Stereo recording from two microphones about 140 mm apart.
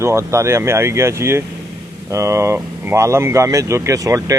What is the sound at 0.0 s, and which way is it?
Speech, 20° right (ahead or behind).